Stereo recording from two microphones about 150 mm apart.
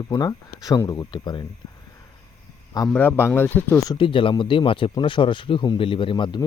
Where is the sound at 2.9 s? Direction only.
10° left (ahead or behind).